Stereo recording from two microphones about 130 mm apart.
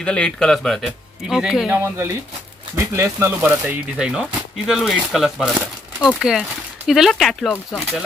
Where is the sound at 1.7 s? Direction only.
20° right (ahead or behind); by 5.5 s centre (ahead or behind).